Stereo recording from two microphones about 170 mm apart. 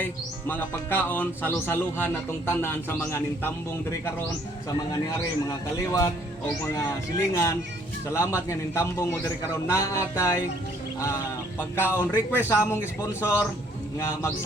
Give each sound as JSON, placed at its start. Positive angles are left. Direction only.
{"t": 0.0, "sound": "speech", "side_deg": 10}
{"t": 4.9, "sound": "a man's voice", "side_deg": 20}
{"t": 11.9, "sound": "speech", "side_deg": 10}